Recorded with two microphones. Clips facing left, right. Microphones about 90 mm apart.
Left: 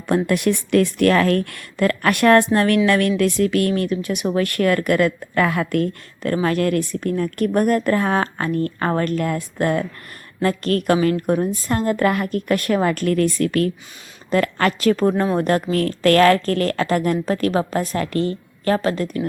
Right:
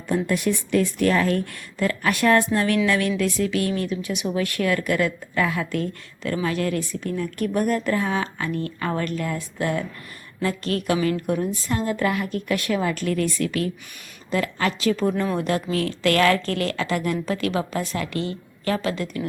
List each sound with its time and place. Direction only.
0.3 s a woman's voice: 65° left (ahead or behind); by 19.2 s 40° left (ahead or behind)